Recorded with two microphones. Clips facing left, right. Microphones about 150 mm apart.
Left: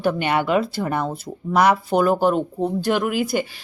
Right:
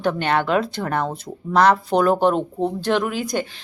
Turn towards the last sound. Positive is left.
turn(degrees=10)  # may be behind; listen again after turning